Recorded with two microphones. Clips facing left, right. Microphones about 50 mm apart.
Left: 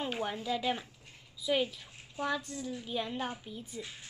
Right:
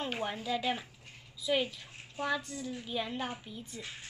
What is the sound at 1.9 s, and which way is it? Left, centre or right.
Bathtub, right.